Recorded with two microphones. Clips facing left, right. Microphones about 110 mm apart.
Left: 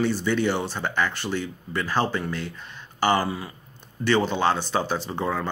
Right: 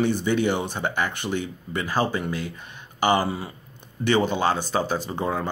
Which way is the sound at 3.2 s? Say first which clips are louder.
Right 1 dB; 25° right (ahead or behind).